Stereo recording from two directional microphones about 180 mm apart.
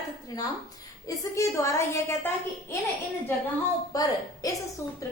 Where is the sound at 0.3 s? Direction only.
20° left (ahead or behind).